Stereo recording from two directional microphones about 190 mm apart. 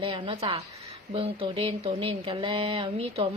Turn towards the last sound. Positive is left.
turn(degrees=-30)  # may be behind; listen again after turning